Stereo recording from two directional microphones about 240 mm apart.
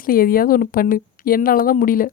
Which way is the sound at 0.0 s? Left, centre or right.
Left.